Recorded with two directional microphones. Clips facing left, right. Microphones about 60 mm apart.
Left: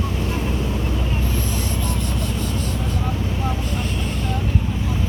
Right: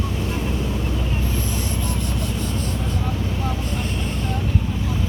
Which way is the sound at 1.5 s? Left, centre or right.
Right.